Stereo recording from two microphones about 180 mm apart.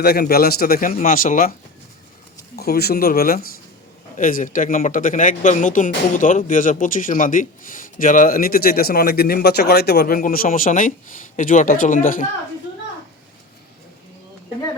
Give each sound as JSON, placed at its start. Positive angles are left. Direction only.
{"t": 0.0, "sound": "speech", "side_deg": 60}
{"t": 2.6, "sound": "speech", "side_deg": 60}